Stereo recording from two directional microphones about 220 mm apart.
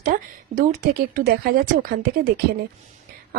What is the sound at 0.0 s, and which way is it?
Speech, 40° right (ahead or behind).